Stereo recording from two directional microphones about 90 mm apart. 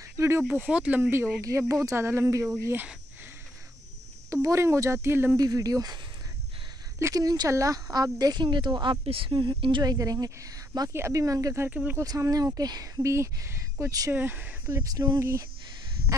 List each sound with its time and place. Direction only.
0.5 s speech: 15° right (ahead or behind)
1.4 s speech: 35° right (ahead or behind)
4.3 s speech: 35° right (ahead or behind)
5.4 s speech: 40° right (ahead or behind)
7.0 s speech: 35° right (ahead or behind); by 8.9 s 60° right (ahead or behind)
9.0 s a woman's voice: 85° right; by 9.9 s 60° right (ahead or behind)
9.9 s speech: 40° right (ahead or behind)
10.9 s speech: 30° right (ahead or behind)
11.6 s speech: 20° right (ahead or behind)
12.0 s speech: 40° right (ahead or behind)
13.1 s speech: 30° right (ahead or behind)
14.1 s speech: 20° right (ahead or behind)
14.8 s speech: 45° right (ahead or behind)
15.1 s speech: 35° right (ahead or behind)